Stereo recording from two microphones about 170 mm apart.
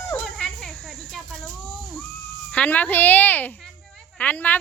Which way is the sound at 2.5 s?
5° left (ahead or behind).